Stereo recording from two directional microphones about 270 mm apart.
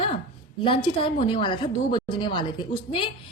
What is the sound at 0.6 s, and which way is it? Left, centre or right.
A woman's voice, centre.